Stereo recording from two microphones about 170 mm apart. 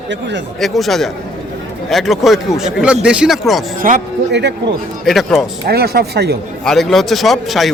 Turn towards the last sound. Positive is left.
turn(degrees=0)  # may be behind; listen again after turning